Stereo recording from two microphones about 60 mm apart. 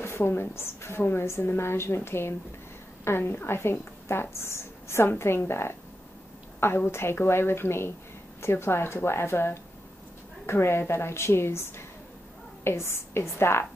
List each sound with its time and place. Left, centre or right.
0.0 s a woman's voice: left
6.9 s a woman's voice: left